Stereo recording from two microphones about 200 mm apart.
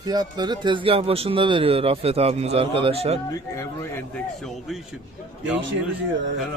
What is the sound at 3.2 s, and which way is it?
Speech, 15° left (ahead or behind).